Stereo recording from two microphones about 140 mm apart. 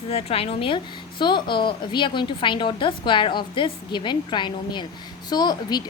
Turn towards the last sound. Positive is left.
turn(degrees=30)  # may be behind; listen again after turning